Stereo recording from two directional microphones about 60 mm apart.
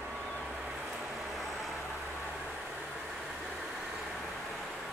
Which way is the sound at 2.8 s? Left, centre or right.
Centre.